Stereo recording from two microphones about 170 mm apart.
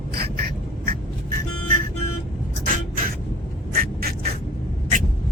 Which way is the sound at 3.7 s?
60° right (ahead or behind).